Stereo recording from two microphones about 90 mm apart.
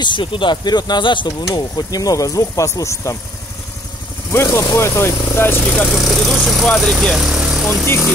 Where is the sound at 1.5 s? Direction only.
45° left (ahead or behind).